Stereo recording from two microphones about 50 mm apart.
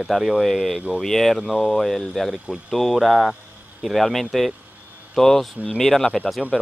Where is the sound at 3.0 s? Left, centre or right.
Centre.